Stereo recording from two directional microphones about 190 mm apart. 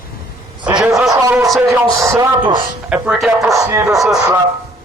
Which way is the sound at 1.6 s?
15° right (ahead or behind).